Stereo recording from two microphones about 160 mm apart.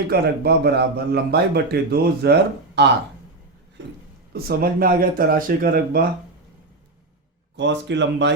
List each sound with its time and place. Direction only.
0.1 s a man's voice: 85° right
4.3 s speech: 75° right (ahead or behind)
7.5 s speech: 90° right